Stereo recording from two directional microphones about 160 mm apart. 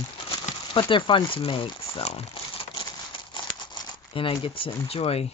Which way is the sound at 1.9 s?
40° left (ahead or behind).